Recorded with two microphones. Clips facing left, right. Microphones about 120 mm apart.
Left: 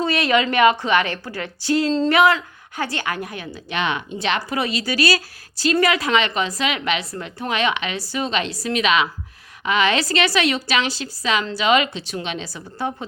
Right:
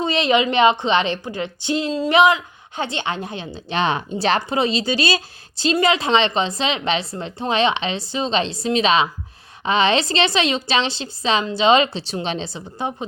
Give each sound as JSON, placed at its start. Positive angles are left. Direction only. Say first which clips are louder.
{"t": 0.0, "sound": "a woman's voice", "louder": "right 1 dB", "side_deg": -20}